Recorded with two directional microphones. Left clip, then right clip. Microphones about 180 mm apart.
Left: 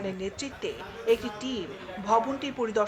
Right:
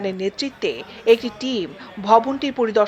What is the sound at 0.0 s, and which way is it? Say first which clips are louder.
Speech: right 10 dB; 35° right (ahead or behind).